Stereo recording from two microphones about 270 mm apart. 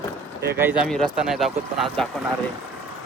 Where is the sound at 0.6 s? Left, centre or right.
Centre.